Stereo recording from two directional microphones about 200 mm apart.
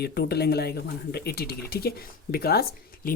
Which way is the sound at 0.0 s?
55° left (ahead or behind).